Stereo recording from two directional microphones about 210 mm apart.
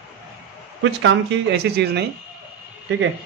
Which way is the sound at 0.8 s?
65° right (ahead or behind).